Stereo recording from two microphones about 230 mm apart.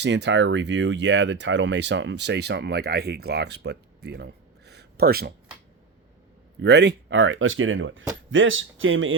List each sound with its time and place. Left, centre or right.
0.0 s speech: right
6.6 s speech: right